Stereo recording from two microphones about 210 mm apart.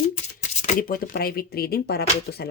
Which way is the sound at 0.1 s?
35° left (ahead or behind).